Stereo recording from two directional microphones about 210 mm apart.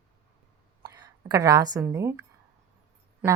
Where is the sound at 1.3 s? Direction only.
15° right (ahead or behind).